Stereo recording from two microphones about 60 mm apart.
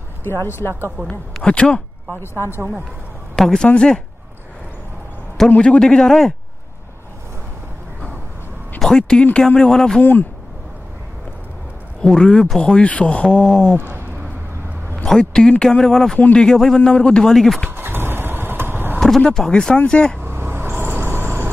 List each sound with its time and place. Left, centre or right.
0.2 s speech: left
1.0 s speech: centre
2.1 s speech: left
3.3 s speech: centre
5.6 s speech: centre
8.7 s speech: centre
12.0 s speech: centre
15.0 s speech: centre
17.6 s vehicle: right
18.9 s a sound: centre
19.3 s speech: centre
20.2 s a sound: right